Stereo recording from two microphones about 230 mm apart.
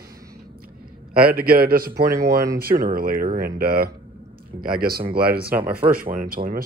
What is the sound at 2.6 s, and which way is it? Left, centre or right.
Speech, right.